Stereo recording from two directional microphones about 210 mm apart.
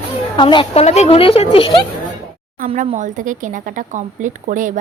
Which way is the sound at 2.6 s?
35° right (ahead or behind).